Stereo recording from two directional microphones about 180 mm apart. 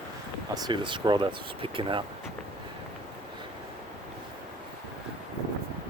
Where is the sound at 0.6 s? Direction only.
25° right (ahead or behind).